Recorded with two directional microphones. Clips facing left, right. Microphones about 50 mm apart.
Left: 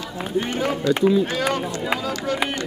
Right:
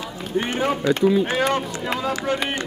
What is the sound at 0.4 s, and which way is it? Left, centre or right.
Speech, right.